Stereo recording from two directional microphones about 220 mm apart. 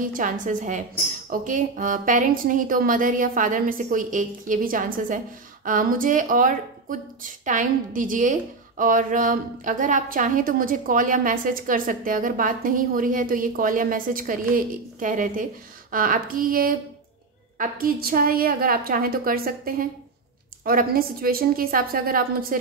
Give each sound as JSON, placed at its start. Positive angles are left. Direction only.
{"t": 0.0, "sound": "speech", "side_deg": -35}